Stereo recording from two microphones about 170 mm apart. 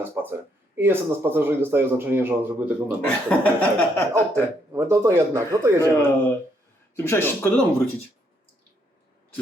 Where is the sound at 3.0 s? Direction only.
10° left (ahead or behind).